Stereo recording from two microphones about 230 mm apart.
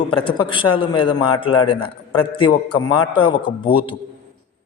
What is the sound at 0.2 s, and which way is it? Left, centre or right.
A man's voice, left.